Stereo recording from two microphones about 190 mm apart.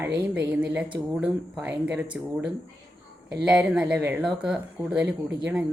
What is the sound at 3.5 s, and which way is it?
Speech, 5° right (ahead or behind).